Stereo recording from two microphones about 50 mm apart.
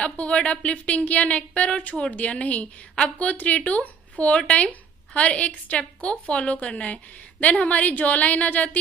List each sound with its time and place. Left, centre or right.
0.0 s a woman's voice: left